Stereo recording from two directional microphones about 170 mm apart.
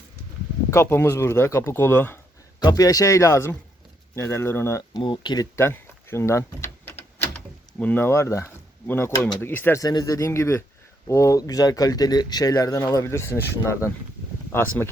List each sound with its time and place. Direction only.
0.7 s speech: 15° left (ahead or behind)
5.0 s speech: 25° left (ahead or behind)
14.5 s speech: 10° left (ahead or behind)